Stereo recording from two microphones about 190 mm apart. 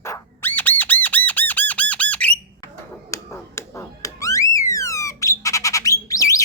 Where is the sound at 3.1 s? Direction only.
15° left (ahead or behind).